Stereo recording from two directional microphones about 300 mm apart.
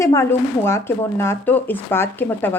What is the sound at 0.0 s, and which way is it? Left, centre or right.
Speech, centre.